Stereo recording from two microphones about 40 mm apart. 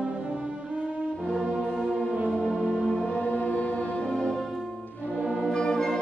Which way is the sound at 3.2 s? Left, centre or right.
Left.